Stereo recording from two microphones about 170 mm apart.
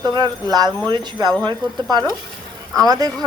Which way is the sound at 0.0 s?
25° right (ahead or behind).